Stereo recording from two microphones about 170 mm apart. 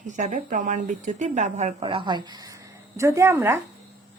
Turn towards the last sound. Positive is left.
turn(degrees=-15)  # may be behind; listen again after turning